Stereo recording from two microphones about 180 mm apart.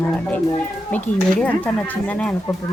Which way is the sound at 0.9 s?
5° left (ahead or behind).